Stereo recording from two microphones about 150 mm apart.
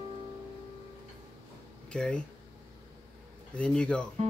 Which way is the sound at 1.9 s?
5° left (ahead or behind).